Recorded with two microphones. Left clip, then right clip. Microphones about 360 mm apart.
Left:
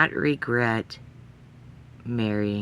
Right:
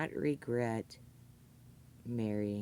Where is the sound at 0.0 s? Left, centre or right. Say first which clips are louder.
Left 14 dB; right.